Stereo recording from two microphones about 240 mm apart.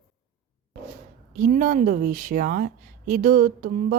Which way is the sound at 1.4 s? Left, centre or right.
Right.